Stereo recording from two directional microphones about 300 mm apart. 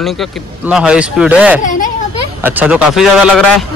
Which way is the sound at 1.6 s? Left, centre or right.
Left.